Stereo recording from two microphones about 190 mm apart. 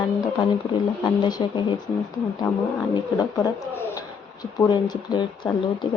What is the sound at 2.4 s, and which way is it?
Speech, 5° left (ahead or behind).